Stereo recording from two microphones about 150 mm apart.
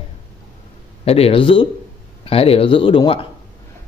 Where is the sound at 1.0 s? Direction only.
40° left (ahead or behind).